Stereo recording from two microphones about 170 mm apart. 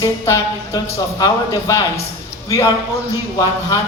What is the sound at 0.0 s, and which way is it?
Speech, 15° left (ahead or behind).